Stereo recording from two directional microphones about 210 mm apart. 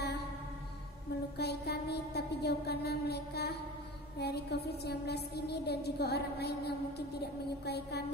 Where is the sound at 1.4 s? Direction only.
50° left (ahead or behind).